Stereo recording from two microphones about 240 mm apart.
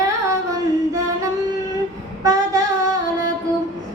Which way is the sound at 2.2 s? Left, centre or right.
Centre.